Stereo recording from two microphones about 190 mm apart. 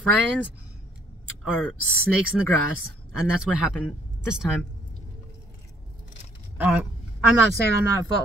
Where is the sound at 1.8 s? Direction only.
90° left.